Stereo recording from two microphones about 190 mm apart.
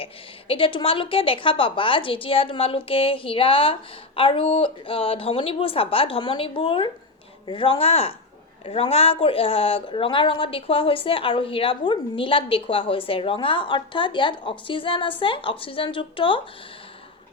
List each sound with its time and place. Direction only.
0.0 s a woman's voice: 30° left (ahead or behind)